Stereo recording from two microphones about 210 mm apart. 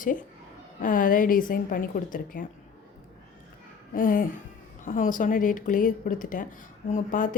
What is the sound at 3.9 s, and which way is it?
Speech, 40° left (ahead or behind).